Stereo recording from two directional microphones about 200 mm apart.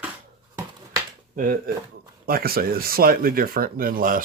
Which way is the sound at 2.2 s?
50° right (ahead or behind).